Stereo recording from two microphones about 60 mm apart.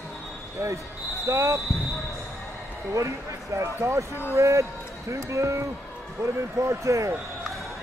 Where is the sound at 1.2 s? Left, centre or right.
Right.